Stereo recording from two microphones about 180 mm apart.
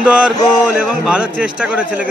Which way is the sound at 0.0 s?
5° right (ahead or behind).